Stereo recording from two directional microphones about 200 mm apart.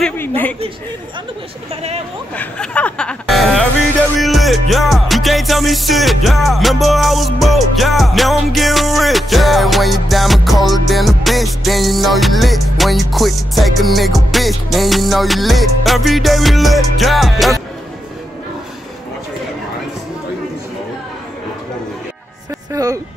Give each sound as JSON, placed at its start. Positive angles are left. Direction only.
{"t": 2.3, "sound": "a sound", "side_deg": 5}
{"t": 4.2, "sound": "music", "side_deg": 0}
{"t": 22.7, "sound": "a woman's voice", "side_deg": -15}